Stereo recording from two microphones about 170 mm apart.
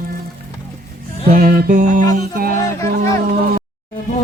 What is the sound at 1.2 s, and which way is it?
Music, 60° right (ahead or behind).